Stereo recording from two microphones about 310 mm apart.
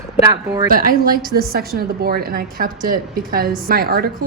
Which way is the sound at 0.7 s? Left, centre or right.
Right.